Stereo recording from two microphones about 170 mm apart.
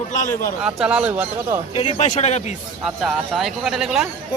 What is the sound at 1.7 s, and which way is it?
Speech, 35° left (ahead or behind).